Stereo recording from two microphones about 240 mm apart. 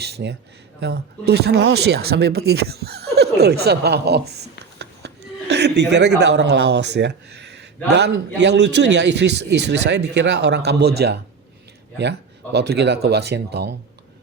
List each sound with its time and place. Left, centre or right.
0.0 s speech: right
12.5 s speech: right